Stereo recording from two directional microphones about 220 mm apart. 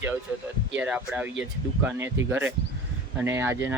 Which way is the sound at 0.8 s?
5° right (ahead or behind).